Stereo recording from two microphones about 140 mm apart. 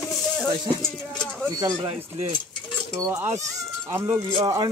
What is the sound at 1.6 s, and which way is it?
Speech, 25° right (ahead or behind).